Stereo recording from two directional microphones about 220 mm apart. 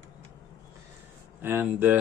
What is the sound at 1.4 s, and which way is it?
Speech, 10° right (ahead or behind).